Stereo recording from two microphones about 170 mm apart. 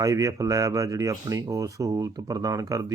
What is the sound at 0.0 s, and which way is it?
Speech, 20° right (ahead or behind).